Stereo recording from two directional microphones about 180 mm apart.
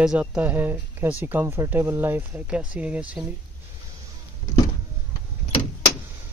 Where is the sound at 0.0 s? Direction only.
5° right (ahead or behind).